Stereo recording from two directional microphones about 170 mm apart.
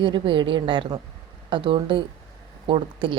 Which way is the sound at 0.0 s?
30° right (ahead or behind).